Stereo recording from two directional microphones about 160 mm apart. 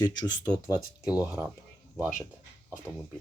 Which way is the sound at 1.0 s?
10° right (ahead or behind).